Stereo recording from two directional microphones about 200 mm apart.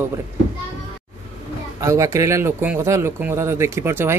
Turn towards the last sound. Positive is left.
turn(degrees=-10)  # may be behind; listen again after turning